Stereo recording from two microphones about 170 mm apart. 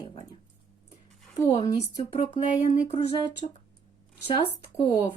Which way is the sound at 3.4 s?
35° left (ahead or behind).